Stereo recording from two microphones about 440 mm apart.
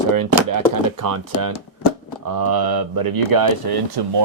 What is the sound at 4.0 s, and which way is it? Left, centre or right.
Speech, right.